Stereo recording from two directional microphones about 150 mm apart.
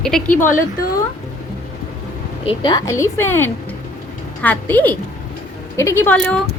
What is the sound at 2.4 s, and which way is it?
A woman's voice, 30° left (ahead or behind).